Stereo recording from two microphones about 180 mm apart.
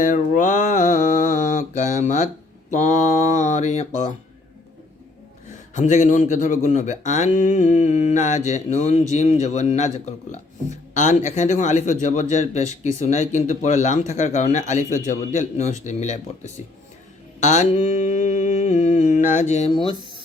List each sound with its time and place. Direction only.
0.0 s a sound: 45° left (ahead or behind)
5.7 s speech: 40° left (ahead or behind)
17.4 s mantra: 40° left (ahead or behind)
19.7 s speech: 25° left (ahead or behind)